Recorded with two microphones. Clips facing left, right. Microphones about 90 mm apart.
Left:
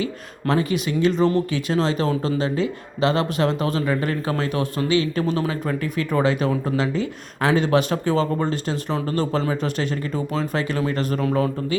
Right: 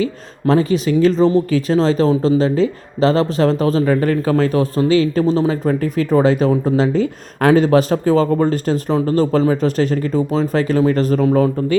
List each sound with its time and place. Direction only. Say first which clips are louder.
0.0 s speech: right 7 dB; 35° right (ahead or behind)